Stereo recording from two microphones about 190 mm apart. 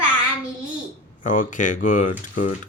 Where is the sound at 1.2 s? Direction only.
45° left (ahead or behind).